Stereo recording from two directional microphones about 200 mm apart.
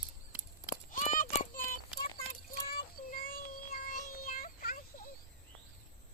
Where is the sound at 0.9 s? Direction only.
40° left (ahead or behind).